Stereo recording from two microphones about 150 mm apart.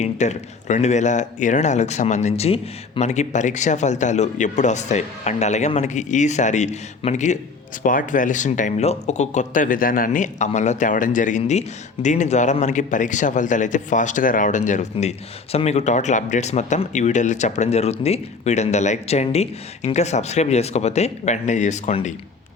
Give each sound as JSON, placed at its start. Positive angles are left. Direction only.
{"t": 0.0, "sound": "speech", "side_deg": 50}
{"t": 7.8, "sound": "speech", "side_deg": 65}